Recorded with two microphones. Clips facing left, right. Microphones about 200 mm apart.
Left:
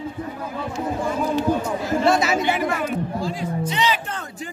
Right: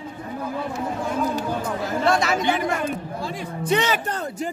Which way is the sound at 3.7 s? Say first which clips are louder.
Right 4 dB; 50° right (ahead or behind).